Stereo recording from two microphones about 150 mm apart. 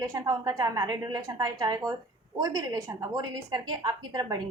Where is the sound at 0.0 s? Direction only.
20° right (ahead or behind).